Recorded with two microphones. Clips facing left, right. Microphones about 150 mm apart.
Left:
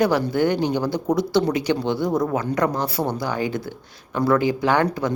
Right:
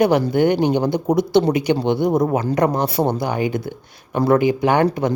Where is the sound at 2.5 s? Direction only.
20° right (ahead or behind).